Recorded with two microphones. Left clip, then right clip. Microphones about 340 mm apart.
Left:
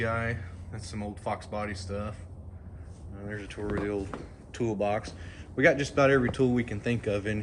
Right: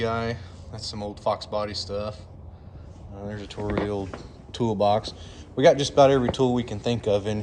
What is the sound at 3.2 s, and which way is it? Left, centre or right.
Speech, right.